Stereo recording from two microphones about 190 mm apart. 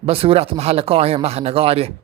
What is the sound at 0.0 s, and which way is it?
Speech, 30° right (ahead or behind).